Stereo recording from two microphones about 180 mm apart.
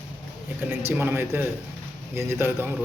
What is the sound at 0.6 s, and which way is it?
Speech, 10° right (ahead or behind).